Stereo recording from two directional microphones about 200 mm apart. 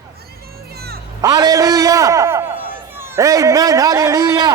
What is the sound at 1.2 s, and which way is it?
A man's voice, 20° right (ahead or behind).